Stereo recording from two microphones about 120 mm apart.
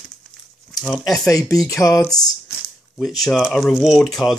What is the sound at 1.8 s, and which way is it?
Speech, 25° left (ahead or behind).